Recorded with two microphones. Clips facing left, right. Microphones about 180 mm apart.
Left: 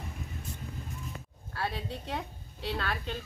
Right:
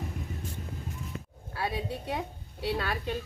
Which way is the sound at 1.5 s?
5° right (ahead or behind).